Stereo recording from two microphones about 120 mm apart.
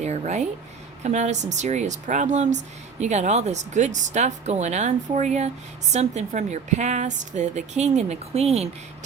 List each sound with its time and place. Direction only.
0.0 s a woman's voice: 70° right (ahead or behind)
3.0 s a woman's voice: 70° right (ahead or behind)